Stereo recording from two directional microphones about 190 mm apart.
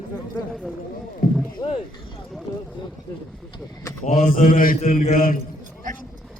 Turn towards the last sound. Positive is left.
turn(degrees=45)  # may be behind; listen again after turning